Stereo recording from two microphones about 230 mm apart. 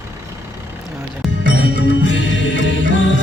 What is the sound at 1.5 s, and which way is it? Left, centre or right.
Music, left.